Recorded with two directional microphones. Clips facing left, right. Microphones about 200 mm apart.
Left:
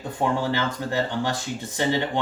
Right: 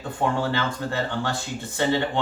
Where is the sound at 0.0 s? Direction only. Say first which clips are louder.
Even; 15° left (ahead or behind).